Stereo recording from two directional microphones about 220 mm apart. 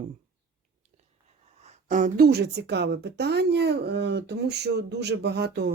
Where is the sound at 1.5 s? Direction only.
30° right (ahead or behind); by 5.7 s 50° right (ahead or behind).